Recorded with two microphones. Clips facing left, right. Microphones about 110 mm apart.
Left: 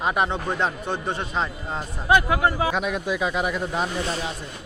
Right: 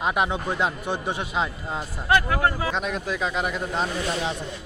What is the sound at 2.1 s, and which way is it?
A man's voice, 15° left (ahead or behind).